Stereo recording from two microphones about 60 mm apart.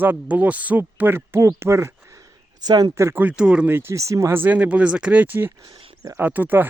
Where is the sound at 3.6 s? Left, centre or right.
Right.